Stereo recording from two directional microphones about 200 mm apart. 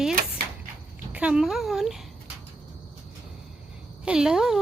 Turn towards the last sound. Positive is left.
turn(degrees=-5)  # may be behind; listen again after turning